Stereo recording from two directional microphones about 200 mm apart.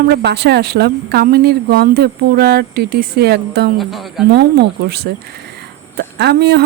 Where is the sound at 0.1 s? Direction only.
55° right (ahead or behind).